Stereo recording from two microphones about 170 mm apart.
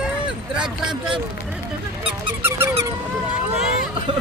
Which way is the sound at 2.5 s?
15° right (ahead or behind).